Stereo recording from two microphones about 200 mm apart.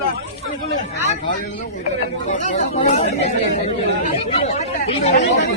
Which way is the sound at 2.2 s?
35° left (ahead or behind).